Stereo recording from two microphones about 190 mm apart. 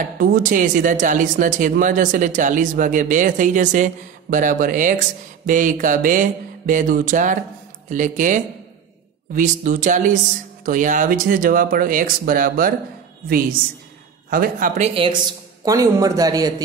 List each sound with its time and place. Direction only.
0.0 s speech: 45° right (ahead or behind)
14.3 s speech: 50° right (ahead or behind)
14.8 s speech: 30° right (ahead or behind)